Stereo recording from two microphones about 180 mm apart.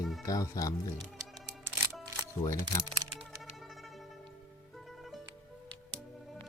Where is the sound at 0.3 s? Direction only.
20° left (ahead or behind).